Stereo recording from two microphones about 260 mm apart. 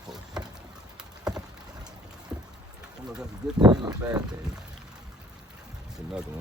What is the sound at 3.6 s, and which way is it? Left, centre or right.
Speech, centre.